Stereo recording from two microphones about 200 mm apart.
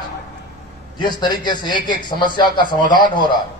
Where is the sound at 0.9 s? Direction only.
20° left (ahead or behind).